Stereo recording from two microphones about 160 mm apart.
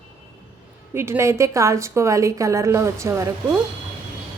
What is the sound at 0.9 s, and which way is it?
A woman's voice, 15° right (ahead or behind).